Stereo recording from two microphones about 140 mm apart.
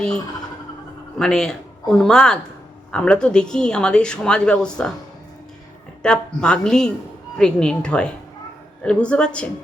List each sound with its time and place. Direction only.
1.2 s speech: 5° left (ahead or behind)
6.0 s speech: 5° left (ahead or behind)